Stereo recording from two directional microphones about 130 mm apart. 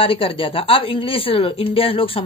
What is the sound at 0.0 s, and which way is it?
A woman's voice, 45° left (ahead or behind).